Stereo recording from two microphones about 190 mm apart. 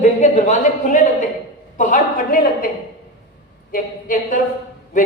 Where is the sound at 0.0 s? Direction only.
40° left (ahead or behind).